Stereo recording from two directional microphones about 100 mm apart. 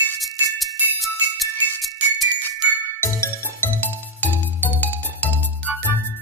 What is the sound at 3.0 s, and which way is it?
Music, 25° left (ahead or behind).